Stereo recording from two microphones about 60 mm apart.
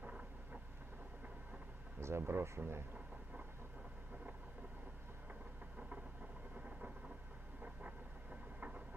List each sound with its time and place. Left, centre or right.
0.0 s vehicle: right
2.0 s speech: right
7.6 s a sound: right